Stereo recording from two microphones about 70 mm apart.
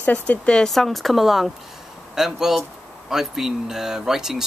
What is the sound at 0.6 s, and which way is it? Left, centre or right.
Speech, centre.